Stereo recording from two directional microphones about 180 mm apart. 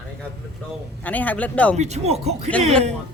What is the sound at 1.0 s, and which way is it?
Speech, 10° left (ahead or behind).